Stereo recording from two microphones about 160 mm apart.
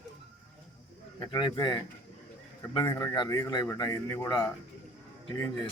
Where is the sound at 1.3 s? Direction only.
25° left (ahead or behind).